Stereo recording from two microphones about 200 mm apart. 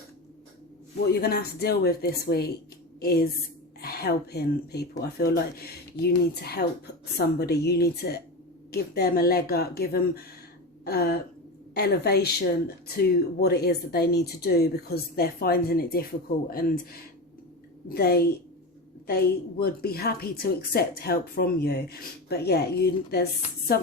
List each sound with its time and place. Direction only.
1.0 s a woman's voice: 50° left (ahead or behind)